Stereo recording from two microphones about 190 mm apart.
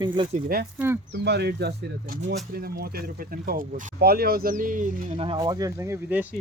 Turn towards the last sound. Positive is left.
turn(degrees=-10)  # may be behind; listen again after turning